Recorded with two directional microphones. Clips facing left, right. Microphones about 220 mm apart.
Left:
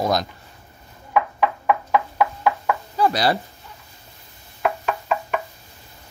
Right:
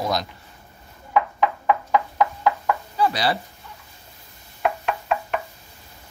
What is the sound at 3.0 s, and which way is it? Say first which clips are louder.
Speech: left 3 dB; 45° left (ahead or behind).